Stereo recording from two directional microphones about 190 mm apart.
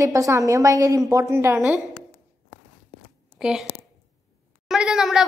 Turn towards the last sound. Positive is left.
turn(degrees=-5)  # may be behind; listen again after turning